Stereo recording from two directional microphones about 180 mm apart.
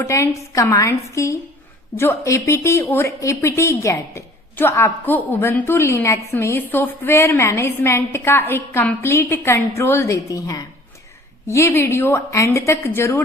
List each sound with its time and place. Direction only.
0.0 s speech: 15° left (ahead or behind)